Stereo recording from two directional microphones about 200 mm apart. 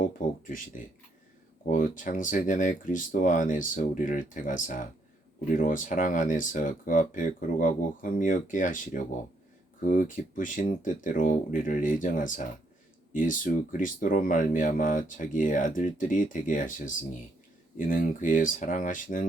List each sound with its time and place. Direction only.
0.0 s speech: 40° left (ahead or behind)